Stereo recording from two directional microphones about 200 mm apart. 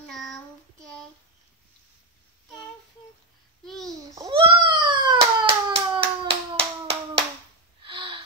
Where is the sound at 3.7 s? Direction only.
Centre (ahead or behind).